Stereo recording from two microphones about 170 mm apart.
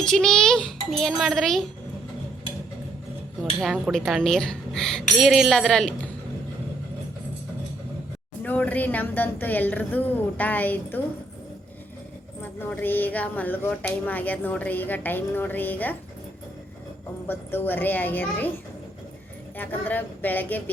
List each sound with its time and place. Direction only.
0.0 s a woman's voice: 5° left (ahead or behind)
3.6 s a woman's voice: 5° right (ahead or behind)
8.4 s a woman's voice: 10° left (ahead or behind)
12.4 s a woman's voice: 10° left (ahead or behind)
17.2 s a woman's voice: 10° left (ahead or behind)
19.5 s a woman's voice: 10° left (ahead or behind)